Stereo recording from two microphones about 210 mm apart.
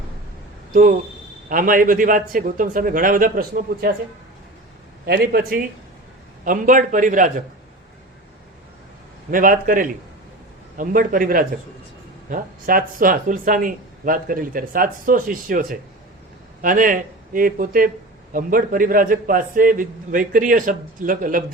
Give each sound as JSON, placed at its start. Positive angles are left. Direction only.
{"t": 0.7, "sound": "speech", "side_deg": -40}
{"t": 5.0, "sound": "speech", "side_deg": -50}
{"t": 9.3, "sound": "speech", "side_deg": -40}